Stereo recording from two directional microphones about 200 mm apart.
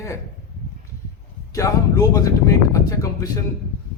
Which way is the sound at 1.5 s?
15° left (ahead or behind).